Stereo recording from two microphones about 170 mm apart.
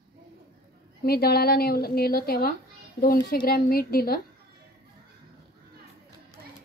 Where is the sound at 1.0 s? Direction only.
65° left (ahead or behind).